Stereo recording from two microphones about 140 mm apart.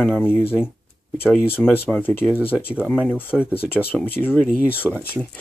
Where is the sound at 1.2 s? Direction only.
15° left (ahead or behind).